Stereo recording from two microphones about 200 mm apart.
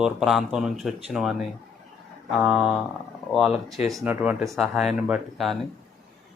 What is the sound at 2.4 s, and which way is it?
Speech, 5° right (ahead or behind).